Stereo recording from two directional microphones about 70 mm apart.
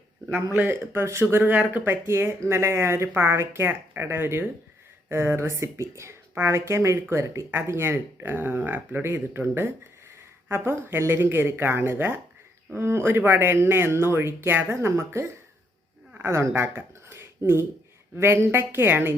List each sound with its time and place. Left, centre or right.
0.5 s speech: right